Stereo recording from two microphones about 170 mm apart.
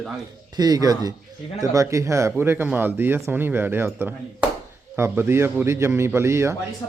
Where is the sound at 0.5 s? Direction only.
25° right (ahead or behind).